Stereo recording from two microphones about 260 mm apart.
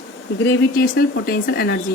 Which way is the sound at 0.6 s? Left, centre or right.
Left.